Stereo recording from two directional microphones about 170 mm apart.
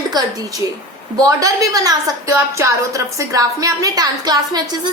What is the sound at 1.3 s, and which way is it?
A woman's voice, 20° right (ahead or behind).